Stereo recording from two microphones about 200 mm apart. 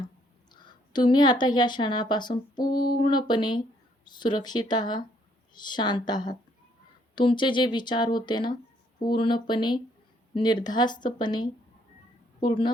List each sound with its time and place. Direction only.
0.5 s a woman's voice: 20° left (ahead or behind)
2.6 s a sound: 45° left (ahead or behind)
3.0 s speech: 20° left (ahead or behind)